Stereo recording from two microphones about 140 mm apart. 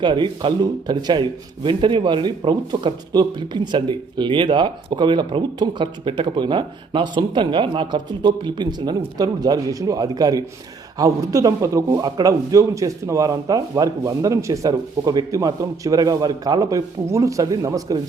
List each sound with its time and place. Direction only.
0.0 s a man's voice: 35° right (ahead or behind)